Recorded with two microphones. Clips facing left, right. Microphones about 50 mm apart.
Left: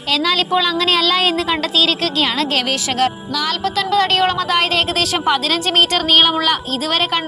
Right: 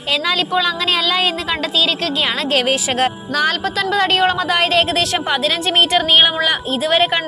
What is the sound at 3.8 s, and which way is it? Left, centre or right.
A woman's voice, centre.